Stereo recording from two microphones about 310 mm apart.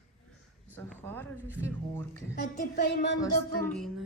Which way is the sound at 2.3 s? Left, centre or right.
Left.